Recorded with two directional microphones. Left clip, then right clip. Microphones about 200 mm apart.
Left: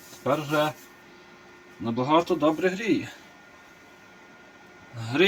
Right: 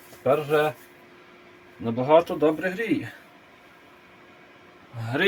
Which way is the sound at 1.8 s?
30° right (ahead or behind).